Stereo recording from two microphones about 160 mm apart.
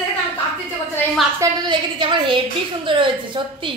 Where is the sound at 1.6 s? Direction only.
30° right (ahead or behind).